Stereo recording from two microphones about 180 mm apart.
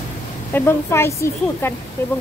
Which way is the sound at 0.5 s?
10° left (ahead or behind).